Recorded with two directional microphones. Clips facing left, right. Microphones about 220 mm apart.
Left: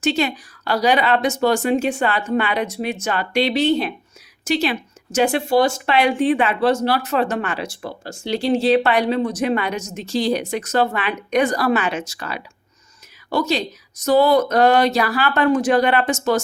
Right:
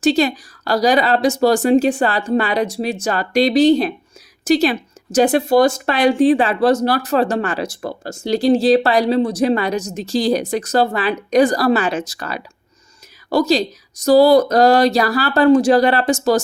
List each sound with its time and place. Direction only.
0.0 s speech: 35° right (ahead or behind)